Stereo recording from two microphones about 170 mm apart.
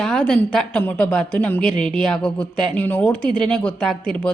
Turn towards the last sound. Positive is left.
turn(degrees=5)  # may be behind; listen again after turning